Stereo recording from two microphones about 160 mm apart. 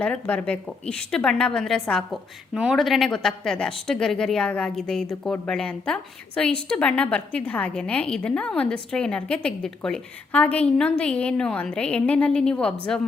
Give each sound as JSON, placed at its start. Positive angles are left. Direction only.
{"t": 0.0, "sound": "a woman's voice", "side_deg": 10}